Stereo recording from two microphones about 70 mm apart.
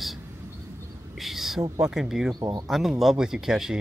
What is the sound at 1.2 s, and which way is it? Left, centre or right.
Speech, centre.